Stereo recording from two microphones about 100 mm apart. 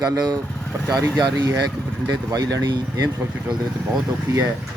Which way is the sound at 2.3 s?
35° right (ahead or behind).